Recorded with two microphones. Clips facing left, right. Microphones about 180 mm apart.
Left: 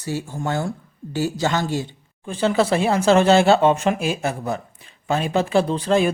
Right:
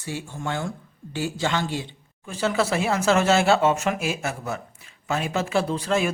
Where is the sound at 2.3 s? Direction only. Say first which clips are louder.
Left 5 dB; 30° left (ahead or behind).